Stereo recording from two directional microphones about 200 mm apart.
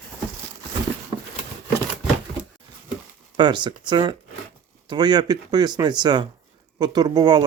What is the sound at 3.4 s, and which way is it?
Speech, 20° right (ahead or behind).